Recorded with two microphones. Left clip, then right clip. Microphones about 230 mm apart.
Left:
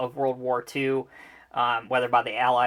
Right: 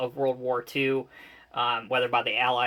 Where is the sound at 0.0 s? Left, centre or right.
Left.